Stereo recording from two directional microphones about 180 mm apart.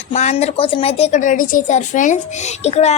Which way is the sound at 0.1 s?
40° left (ahead or behind).